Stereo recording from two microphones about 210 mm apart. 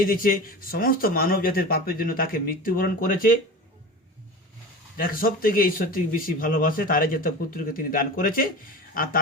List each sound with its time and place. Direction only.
0.0 s a man's voice: 45° left (ahead or behind)
4.9 s a man's voice: 45° left (ahead or behind)